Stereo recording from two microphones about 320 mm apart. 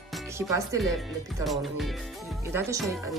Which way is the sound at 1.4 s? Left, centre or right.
Centre.